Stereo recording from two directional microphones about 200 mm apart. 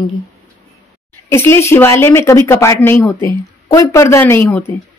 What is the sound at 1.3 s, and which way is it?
Speech, 10° left (ahead or behind).